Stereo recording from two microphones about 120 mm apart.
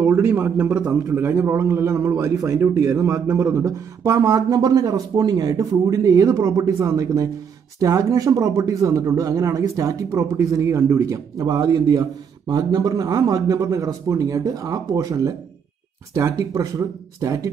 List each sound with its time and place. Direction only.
0.0 s speech: 20° right (ahead or behind)